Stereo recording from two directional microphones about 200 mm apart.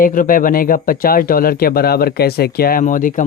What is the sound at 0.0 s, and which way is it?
Speech, 45° left (ahead or behind).